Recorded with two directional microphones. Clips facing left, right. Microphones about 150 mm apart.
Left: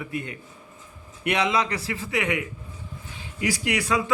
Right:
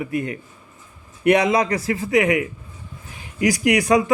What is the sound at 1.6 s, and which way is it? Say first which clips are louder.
Speech: right 6 dB; 40° right (ahead or behind).